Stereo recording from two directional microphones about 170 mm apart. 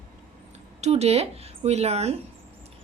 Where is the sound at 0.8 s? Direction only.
40° right (ahead or behind).